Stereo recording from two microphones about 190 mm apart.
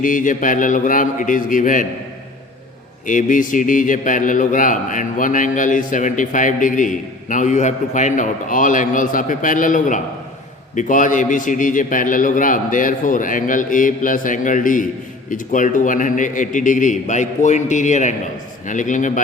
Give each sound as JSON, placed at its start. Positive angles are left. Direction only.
{"t": 0.0, "sound": "a man's voice", "side_deg": 45}
{"t": 3.1, "sound": "a man's voice", "side_deg": 45}